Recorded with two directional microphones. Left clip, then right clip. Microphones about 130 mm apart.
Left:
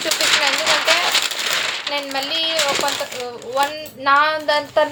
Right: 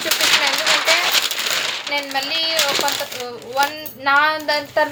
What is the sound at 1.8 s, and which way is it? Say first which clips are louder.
Speech: right 1 dB; 25° left (ahead or behind).